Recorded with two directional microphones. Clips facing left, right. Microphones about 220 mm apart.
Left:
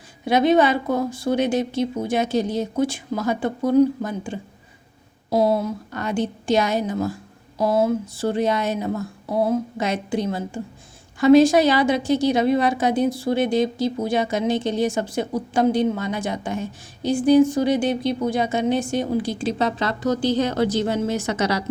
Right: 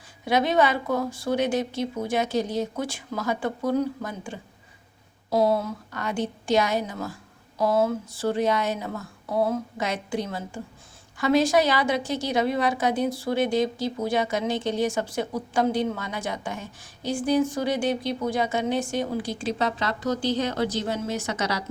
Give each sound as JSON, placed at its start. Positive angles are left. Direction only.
{"t": 0.3, "sound": "a woman's voice", "side_deg": 25}